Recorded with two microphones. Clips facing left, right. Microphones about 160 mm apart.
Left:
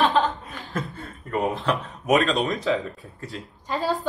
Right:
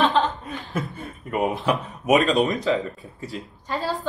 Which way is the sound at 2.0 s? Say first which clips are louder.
Right 2 dB; centre (ahead or behind).